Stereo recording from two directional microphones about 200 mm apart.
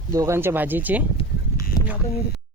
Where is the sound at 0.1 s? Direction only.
15° right (ahead or behind).